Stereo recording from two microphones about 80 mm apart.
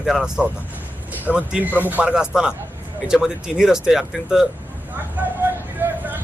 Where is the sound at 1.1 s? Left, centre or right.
Right.